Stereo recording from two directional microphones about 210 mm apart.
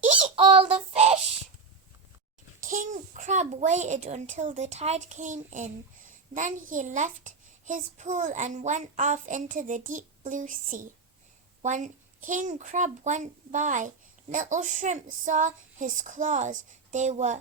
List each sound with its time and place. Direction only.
0.3 s child singing: 25° right (ahead or behind)
2.6 s a child's voice: 40° right (ahead or behind)